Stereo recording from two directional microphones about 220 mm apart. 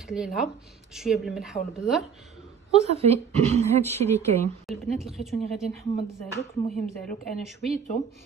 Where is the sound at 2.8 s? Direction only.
30° right (ahead or behind).